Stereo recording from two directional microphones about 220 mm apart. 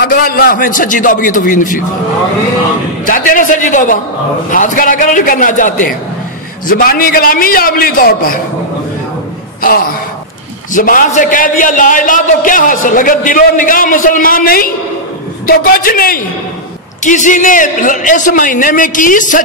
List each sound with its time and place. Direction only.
0.0 s a man's voice: 45° left (ahead or behind)
3.1 s a man's voice: 35° left (ahead or behind)
9.6 s a man's voice: 40° left (ahead or behind)